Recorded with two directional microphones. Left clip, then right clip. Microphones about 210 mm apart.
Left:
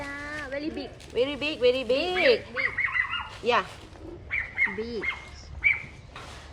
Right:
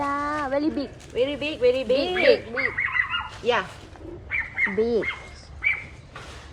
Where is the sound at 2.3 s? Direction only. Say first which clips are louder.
Right 4 dB; 15° right (ahead or behind).